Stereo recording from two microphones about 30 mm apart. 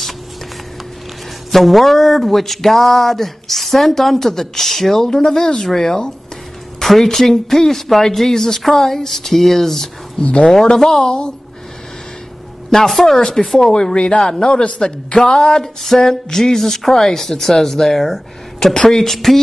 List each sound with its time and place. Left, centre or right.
1.5 s speech: centre
10.2 s speech: left
10.5 s speech: left
12.7 s speech: centre
13.9 s speech: left
15.6 s speech: centre